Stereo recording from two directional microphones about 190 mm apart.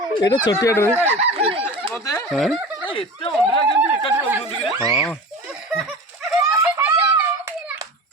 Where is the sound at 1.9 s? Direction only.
15° left (ahead or behind).